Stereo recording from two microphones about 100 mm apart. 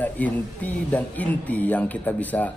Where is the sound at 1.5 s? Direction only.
15° left (ahead or behind).